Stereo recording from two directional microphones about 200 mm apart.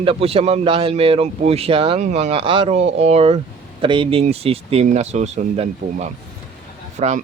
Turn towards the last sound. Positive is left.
turn(degrees=-35)  # may be behind; listen again after turning